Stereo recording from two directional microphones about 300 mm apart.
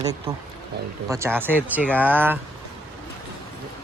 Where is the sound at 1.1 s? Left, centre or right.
Centre.